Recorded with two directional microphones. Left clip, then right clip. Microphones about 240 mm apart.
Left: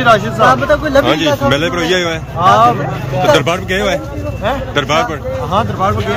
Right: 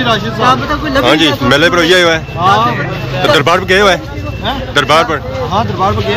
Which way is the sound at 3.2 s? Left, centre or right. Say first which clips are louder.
Right 2 dB; centre.